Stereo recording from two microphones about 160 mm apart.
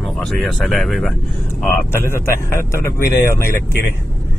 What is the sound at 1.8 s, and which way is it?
Speech, 15° left (ahead or behind).